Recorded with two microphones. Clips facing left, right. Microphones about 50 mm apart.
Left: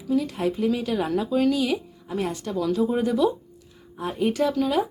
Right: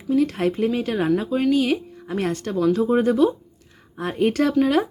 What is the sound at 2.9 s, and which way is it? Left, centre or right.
Speech, right.